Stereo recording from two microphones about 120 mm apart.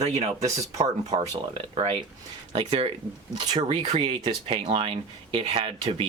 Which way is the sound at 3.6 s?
50° right (ahead or behind).